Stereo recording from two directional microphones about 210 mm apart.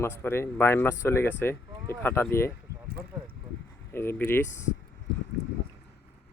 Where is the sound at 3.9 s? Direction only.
10° left (ahead or behind).